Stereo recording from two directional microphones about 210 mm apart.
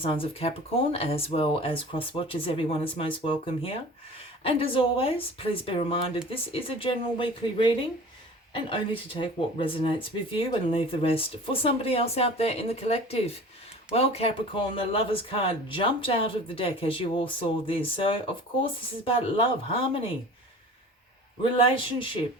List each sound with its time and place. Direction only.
0.0 s speech: 25° left (ahead or behind)
21.4 s speech: 25° left (ahead or behind)